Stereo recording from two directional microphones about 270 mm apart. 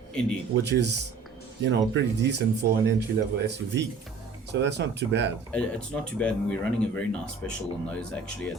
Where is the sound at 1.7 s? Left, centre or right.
Right.